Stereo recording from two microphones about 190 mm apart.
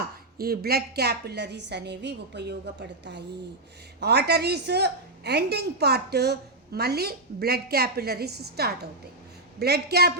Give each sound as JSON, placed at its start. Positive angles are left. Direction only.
{"t": 0.3, "sound": "a woman's voice", "side_deg": -55}